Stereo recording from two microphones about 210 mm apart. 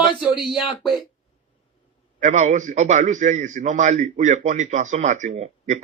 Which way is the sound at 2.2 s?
35° right (ahead or behind).